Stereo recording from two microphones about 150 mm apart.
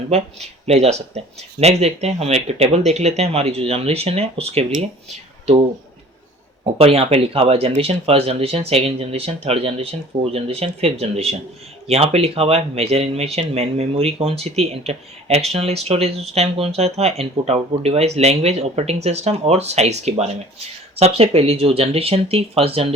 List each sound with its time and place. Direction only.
0.1 s speech: 45° right (ahead or behind)
6.7 s speech: 40° right (ahead or behind)